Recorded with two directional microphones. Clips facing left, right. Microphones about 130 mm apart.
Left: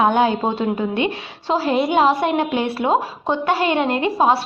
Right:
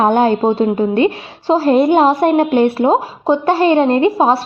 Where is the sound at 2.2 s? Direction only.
45° right (ahead or behind).